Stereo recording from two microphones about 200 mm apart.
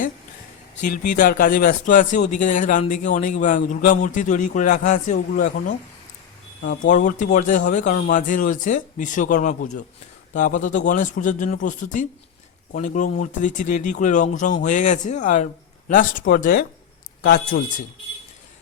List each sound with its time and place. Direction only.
0.9 s speech: 40° left (ahead or behind)
6.6 s speech: 60° left (ahead or behind)
6.9 s speech: 40° left (ahead or behind)